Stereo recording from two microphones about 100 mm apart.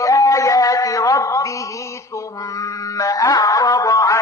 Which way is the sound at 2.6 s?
35° left (ahead or behind).